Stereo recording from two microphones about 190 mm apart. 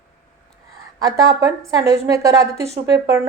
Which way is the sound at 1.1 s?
15° right (ahead or behind).